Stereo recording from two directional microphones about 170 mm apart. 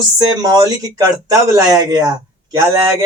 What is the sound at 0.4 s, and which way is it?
Speech, 20° right (ahead or behind).